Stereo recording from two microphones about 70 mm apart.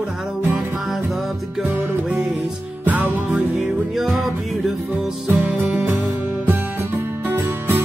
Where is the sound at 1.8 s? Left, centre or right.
Right.